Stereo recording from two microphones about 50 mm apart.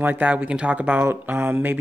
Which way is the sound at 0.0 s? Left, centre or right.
Right.